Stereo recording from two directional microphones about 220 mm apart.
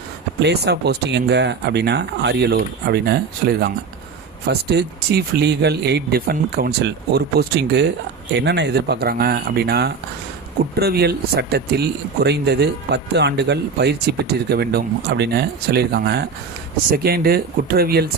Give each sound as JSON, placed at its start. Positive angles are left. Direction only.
{"t": 0.3, "sound": "speech", "side_deg": -50}